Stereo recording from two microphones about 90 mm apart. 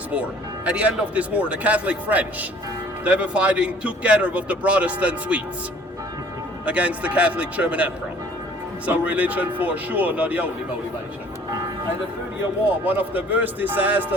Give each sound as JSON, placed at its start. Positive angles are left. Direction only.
{"t": 0.1, "sound": "speech", "side_deg": -15}
{"t": 6.7, "sound": "speech", "side_deg": -15}
{"t": 12.8, "sound": "a man's voice", "side_deg": -20}